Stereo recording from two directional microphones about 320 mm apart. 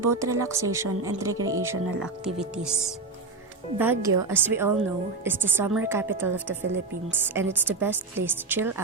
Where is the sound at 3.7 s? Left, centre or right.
Centre.